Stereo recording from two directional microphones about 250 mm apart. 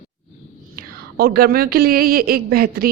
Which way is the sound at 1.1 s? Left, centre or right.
Right.